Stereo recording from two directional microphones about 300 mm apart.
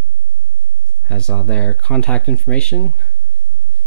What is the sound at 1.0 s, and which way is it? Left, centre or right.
Speech, centre.